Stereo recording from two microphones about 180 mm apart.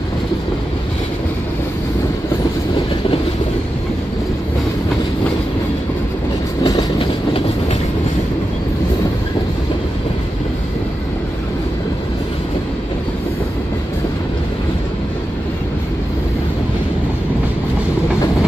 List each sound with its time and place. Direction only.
6.6 s train: 20° left (ahead or behind)